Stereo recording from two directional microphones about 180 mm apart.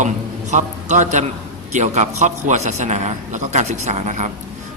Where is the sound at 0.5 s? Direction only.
40° right (ahead or behind).